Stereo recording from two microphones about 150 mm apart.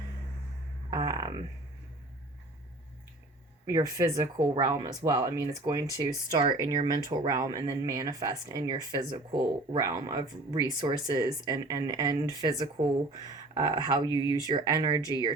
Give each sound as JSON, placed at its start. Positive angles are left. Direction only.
{"t": 0.9, "sound": "speech", "side_deg": -25}
{"t": 3.7, "sound": "speech", "side_deg": -25}